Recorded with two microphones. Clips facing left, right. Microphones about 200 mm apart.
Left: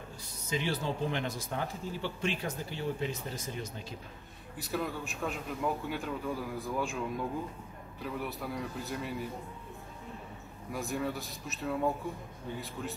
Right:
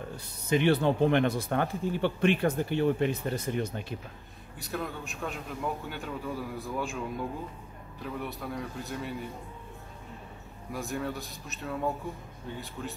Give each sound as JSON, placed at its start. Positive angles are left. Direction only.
{"t": 0.5, "sound": "speech", "side_deg": -60}
{"t": 4.6, "sound": "a man's voice", "side_deg": 0}
{"t": 8.0, "sound": "a man's voice", "side_deg": 0}
{"t": 10.7, "sound": "a man's voice", "side_deg": 0}